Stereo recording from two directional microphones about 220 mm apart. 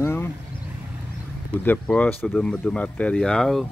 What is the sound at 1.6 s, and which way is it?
Speech, 5° left (ahead or behind).